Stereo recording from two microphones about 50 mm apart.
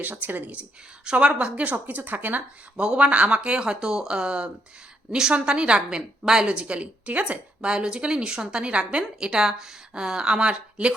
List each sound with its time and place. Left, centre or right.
0.0 s a woman's voice: right
1.0 s a woman's voice: right
2.7 s a woman's voice: centre